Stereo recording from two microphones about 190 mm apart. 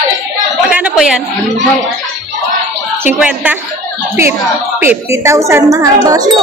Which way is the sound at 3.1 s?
5° right (ahead or behind).